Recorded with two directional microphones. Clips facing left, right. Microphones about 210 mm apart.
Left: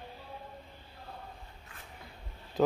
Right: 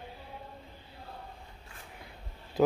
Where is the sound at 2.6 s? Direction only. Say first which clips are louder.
Right 2 dB; 10° right (ahead or behind).